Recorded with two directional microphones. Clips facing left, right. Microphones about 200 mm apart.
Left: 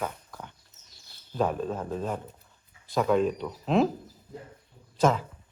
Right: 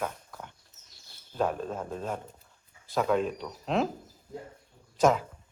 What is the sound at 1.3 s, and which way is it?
Speech, centre (ahead or behind).